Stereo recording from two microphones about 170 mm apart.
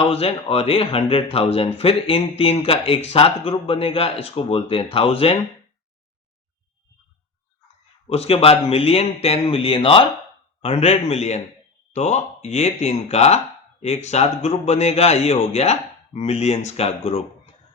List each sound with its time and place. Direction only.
0.0 s speech: 35° left (ahead or behind)
8.1 s speech: 35° left (ahead or behind)